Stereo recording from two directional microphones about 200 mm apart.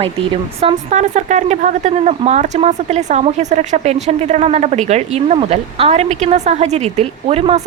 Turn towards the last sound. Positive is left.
turn(degrees=-30)  # may be behind; listen again after turning